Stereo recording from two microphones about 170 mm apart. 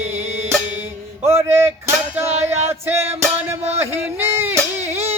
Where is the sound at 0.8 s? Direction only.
15° right (ahead or behind).